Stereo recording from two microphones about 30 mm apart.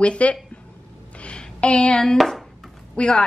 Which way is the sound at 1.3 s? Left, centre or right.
Left.